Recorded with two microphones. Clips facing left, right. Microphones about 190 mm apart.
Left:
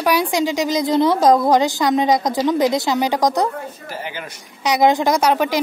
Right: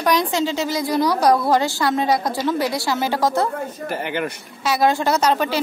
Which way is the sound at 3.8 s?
60° right (ahead or behind).